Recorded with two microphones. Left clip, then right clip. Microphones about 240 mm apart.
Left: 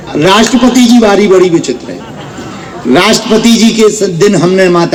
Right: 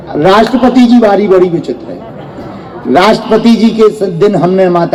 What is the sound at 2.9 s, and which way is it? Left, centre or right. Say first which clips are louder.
A man's voice: right 1 dB; left.